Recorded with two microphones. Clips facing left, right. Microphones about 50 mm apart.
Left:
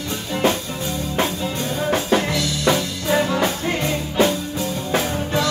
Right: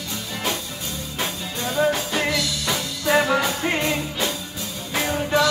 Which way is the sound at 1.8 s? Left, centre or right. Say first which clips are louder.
Left 3 dB; left.